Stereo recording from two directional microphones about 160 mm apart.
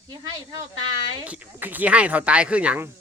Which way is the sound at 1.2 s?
10° right (ahead or behind).